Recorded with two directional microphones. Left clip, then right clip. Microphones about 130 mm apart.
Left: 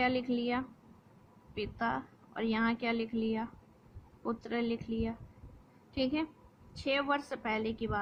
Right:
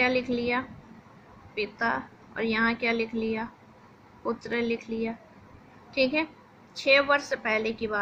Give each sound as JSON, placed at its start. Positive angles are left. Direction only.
{"t": 0.0, "sound": "speech", "side_deg": 55}